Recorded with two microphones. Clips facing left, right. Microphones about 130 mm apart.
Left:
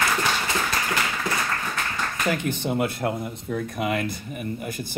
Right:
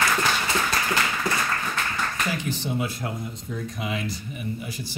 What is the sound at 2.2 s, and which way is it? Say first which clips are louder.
Speech: left 4 dB; 55° left (ahead or behind).